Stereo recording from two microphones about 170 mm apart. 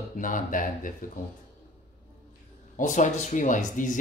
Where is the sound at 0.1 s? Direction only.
50° left (ahead or behind).